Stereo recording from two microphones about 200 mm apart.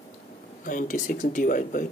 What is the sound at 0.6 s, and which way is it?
Speech, 40° left (ahead or behind).